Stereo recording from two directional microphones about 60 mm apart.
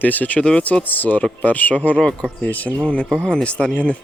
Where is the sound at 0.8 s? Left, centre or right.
Left.